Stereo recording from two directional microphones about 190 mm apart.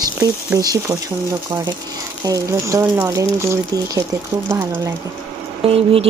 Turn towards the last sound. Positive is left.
turn(degrees=-30)  # may be behind; listen again after turning